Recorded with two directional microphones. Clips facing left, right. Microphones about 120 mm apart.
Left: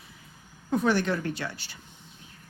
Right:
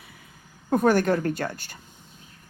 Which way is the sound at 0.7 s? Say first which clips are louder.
Right 5 dB; 50° right (ahead or behind).